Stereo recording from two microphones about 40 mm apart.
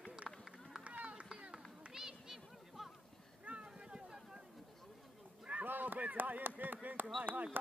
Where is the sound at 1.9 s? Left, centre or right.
Centre.